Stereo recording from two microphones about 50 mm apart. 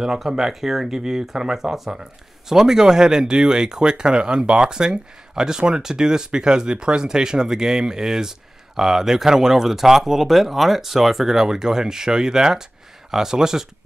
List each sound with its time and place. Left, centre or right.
0.0 s speech: centre